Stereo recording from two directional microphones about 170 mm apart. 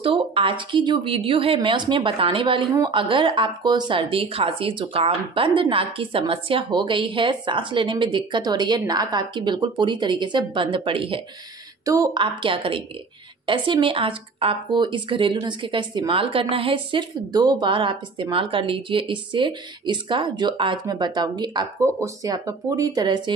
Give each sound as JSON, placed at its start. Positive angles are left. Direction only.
{"t": 0.0, "sound": "a woman's voice", "side_deg": -30}
{"t": 11.8, "sound": "a woman's voice", "side_deg": -20}